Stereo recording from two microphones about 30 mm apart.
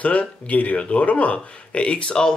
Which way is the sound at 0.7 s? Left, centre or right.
Left.